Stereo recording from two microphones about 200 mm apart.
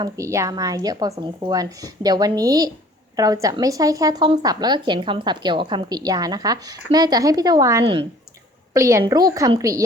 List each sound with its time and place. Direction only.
0.0 s a woman's voice: 15° right (ahead or behind)